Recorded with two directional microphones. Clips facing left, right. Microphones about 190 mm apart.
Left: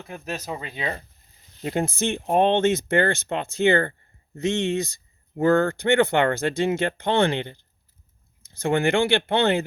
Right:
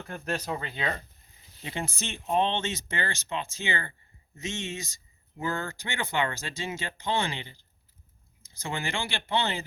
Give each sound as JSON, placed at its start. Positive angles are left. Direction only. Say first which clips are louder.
{"t": 0.0, "sound": "speech", "louder": "even", "side_deg": 10}
{"t": 1.6, "sound": "speech", "louder": "left 11 dB", "side_deg": 45}